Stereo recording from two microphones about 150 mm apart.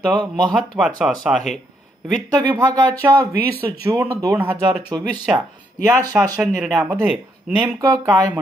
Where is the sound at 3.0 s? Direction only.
10° right (ahead or behind); by 5.2 s 30° right (ahead or behind).